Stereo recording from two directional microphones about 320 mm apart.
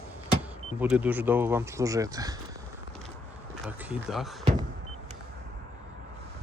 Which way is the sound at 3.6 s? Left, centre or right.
Centre.